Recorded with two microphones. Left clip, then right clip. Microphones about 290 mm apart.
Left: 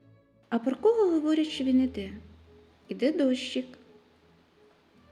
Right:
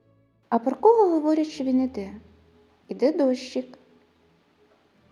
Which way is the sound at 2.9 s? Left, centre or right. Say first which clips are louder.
Right 5 dB; centre.